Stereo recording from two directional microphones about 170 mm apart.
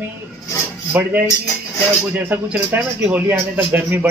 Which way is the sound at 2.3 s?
10° right (ahead or behind).